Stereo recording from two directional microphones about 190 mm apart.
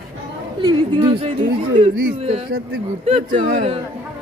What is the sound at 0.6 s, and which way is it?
Speech, 25° right (ahead or behind).